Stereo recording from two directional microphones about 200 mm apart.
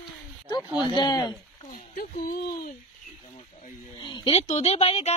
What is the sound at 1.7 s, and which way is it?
Speech, 45° left (ahead or behind).